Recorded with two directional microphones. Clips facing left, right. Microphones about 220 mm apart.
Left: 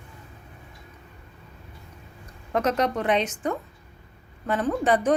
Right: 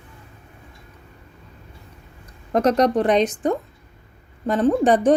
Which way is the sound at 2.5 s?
40° right (ahead or behind).